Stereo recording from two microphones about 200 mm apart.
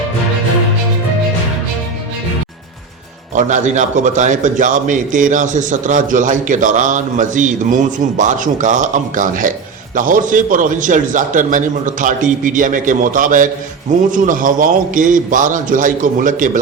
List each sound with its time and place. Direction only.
3.3 s a man's voice: 35° right (ahead or behind)